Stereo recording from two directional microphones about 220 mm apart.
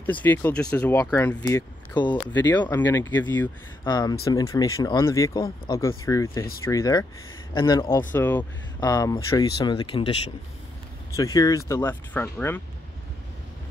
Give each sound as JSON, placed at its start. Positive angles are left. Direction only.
{"t": 0.0, "sound": "speech", "side_deg": 10}
{"t": 2.3, "sound": "speech", "side_deg": 10}